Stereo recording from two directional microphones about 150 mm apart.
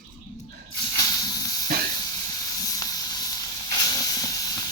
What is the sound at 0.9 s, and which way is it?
Hiss, 25° left (ahead or behind).